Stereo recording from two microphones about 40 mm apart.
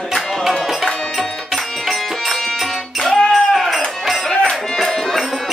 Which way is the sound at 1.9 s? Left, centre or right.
Centre.